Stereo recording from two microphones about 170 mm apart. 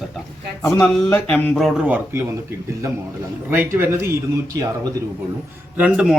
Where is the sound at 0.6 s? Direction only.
20° left (ahead or behind); by 1.9 s centre (ahead or behind).